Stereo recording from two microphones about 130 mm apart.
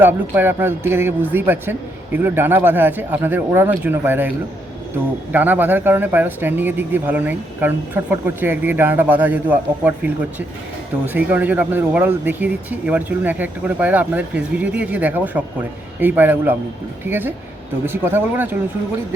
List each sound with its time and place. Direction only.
0.0 s speech: 15° right (ahead or behind)
5.3 s speech: 15° right (ahead or behind)